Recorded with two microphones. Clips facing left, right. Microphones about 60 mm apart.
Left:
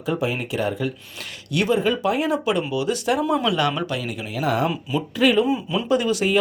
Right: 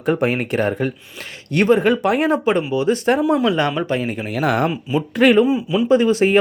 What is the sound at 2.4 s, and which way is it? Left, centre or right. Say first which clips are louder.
Speech: right 5 dB; right.